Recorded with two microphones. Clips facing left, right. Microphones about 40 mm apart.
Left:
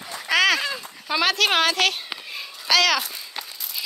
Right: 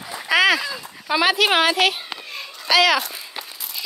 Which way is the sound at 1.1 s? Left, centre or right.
Centre.